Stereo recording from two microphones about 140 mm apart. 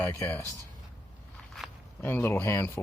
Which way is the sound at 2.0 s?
15° left (ahead or behind).